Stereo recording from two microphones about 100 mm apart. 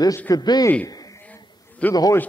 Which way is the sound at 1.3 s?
15° left (ahead or behind).